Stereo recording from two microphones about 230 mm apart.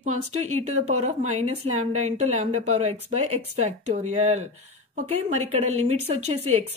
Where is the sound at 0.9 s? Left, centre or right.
Right.